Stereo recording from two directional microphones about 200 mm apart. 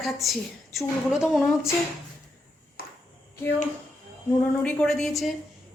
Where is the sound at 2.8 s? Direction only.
50° left (ahead or behind).